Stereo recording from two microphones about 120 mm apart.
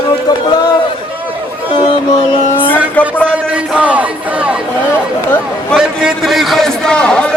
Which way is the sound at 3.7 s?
10° right (ahead or behind).